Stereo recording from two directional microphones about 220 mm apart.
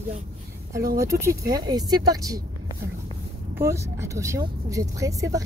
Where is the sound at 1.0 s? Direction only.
15° right (ahead or behind).